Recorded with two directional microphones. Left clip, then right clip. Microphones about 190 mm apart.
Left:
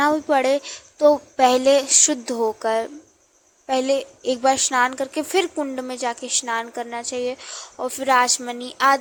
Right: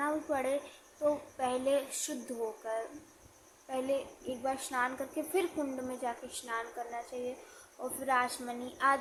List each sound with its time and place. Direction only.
0.0 s a woman's voice: 50° left (ahead or behind)